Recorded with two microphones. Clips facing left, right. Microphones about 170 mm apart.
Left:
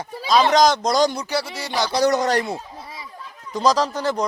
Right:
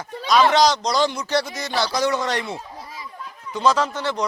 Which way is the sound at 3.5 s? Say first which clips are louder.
Left 1 dB; 35° left (ahead or behind).